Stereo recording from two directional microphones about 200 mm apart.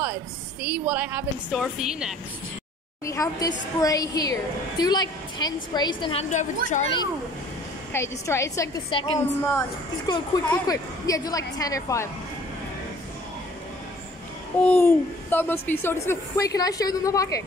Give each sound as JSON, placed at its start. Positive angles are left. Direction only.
{"t": 0.0, "sound": "a woman's voice", "side_deg": -10}
{"t": 3.1, "sound": "a woman's voice", "side_deg": 15}
{"t": 6.3, "sound": "a woman's voice", "side_deg": 35}
{"t": 7.9, "sound": "a woman's voice", "side_deg": 15}
{"t": 8.9, "sound": "a woman's voice", "side_deg": 25}
{"t": 14.6, "sound": "a woman's voice", "side_deg": 10}